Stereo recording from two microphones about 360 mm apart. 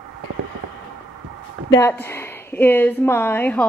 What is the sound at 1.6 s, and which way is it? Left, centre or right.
A woman's voice, centre.